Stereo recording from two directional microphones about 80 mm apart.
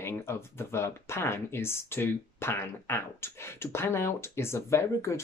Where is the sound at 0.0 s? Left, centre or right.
Left.